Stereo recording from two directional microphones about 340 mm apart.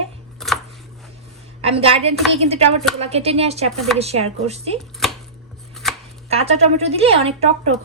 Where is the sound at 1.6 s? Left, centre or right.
Centre.